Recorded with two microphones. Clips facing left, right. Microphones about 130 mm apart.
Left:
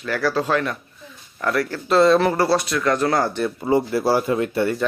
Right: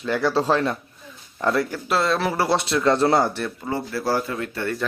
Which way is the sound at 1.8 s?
Centre (ahead or behind).